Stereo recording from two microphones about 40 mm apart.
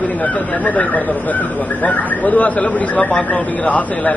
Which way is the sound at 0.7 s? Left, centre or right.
Left.